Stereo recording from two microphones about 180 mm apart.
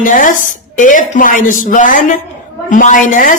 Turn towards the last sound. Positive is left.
turn(degrees=45)  # may be behind; listen again after turning